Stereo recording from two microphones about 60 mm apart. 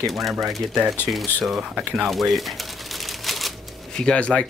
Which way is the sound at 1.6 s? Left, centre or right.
Centre.